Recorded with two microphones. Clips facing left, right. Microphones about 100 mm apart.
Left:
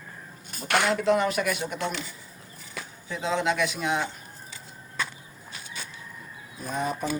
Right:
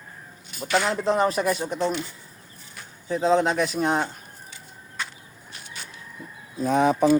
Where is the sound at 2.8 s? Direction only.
90° left.